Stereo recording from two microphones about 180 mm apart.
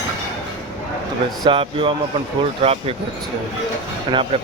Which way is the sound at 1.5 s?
30° right (ahead or behind).